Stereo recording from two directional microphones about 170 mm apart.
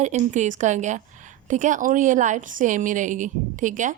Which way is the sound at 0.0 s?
45° right (ahead or behind).